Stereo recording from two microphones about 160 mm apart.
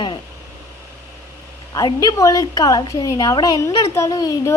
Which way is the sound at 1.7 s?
25° left (ahead or behind).